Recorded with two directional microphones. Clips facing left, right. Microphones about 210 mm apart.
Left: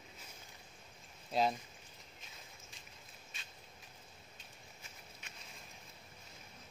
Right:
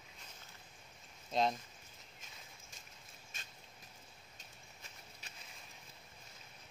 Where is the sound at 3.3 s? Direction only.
45° right (ahead or behind).